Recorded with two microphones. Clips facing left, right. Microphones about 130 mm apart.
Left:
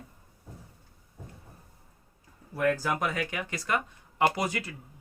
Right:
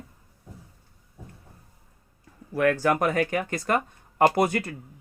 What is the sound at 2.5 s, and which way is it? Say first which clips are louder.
Speech: right 5 dB; 75° right (ahead or behind).